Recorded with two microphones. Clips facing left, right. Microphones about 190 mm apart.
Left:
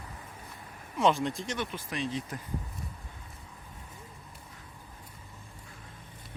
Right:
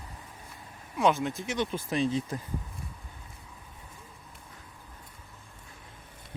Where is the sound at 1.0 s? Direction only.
Centre (ahead or behind).